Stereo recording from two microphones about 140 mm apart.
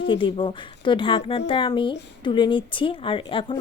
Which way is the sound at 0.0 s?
40° left (ahead or behind).